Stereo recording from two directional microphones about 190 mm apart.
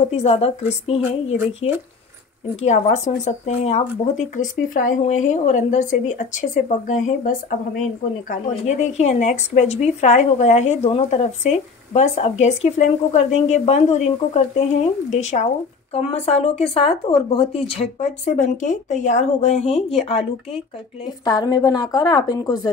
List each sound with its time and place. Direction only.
0.0 s speech: 35° left (ahead or behind)
21.2 s a woman's voice: 20° left (ahead or behind)